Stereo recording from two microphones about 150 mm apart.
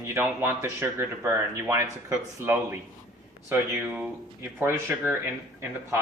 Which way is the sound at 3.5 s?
5° right (ahead or behind).